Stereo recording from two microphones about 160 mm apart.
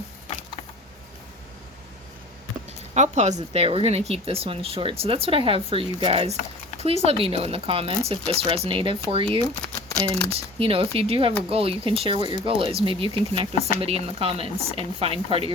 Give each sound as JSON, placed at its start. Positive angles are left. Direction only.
{"t": 2.9, "sound": "speech", "side_deg": -45}